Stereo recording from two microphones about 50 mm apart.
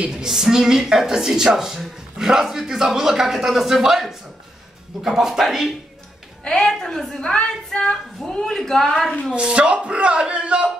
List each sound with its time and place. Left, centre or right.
0.1 s a man's voice: centre
6.4 s speech: centre
9.3 s speech: centre